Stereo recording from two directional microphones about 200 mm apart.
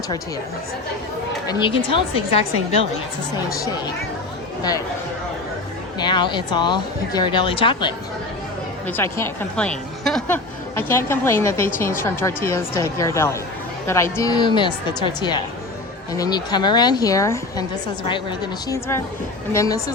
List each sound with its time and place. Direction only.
1.5 s speech: 25° left (ahead or behind)
6.0 s speech: 20° left (ahead or behind)
8.9 s a woman's voice: 10° left (ahead or behind)